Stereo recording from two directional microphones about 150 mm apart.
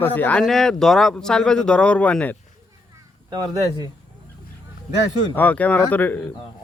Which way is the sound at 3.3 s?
25° right (ahead or behind).